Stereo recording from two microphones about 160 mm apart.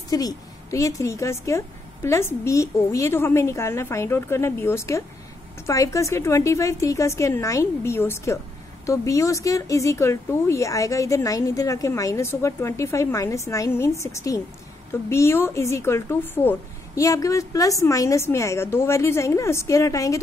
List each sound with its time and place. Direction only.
0.1 s a woman's voice: 25° left (ahead or behind)